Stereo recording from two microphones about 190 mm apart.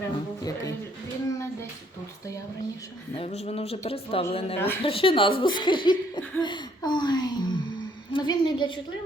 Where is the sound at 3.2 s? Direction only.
35° left (ahead or behind).